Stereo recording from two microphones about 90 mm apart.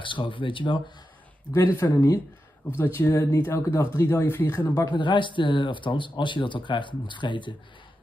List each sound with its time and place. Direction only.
0.0 s speech: 70° left (ahead or behind)
1.5 s speech: 25° left (ahead or behind)
4.7 s speech: 55° left (ahead or behind)